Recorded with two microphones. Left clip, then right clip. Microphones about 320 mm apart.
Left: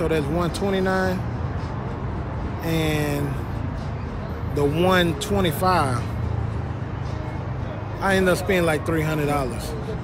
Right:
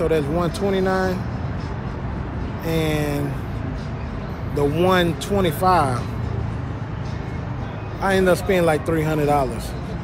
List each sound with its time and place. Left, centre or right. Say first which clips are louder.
0.0 s speech: right 3 dB; centre
2.6 s speech: right 2 dB; centre
4.6 s speech: right 1 dB; centre
8.0 s speech: right 2 dB; centre